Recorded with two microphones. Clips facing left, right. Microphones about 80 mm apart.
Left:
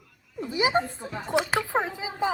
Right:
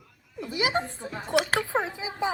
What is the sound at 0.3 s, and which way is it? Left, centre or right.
A woman's voice, left.